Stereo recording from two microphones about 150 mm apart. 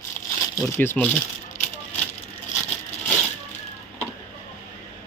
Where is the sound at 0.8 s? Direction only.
10° left (ahead or behind).